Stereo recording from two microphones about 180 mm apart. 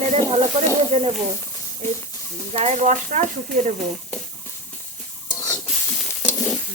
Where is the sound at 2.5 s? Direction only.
40° right (ahead or behind).